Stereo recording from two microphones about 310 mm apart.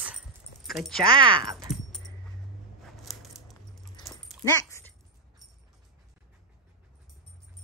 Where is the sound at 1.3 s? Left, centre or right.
Centre.